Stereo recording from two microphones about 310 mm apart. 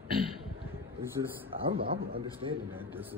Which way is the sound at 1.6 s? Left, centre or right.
Right.